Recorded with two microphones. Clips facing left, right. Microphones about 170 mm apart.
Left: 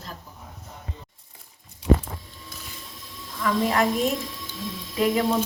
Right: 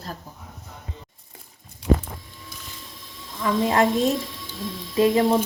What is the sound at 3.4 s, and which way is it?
Speech, 25° right (ahead or behind).